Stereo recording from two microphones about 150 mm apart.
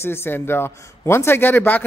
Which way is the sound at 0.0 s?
15° left (ahead or behind).